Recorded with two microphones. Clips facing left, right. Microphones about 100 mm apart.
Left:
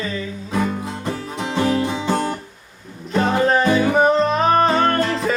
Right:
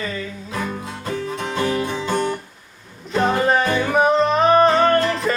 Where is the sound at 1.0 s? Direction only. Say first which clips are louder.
Even; 20° left (ahead or behind).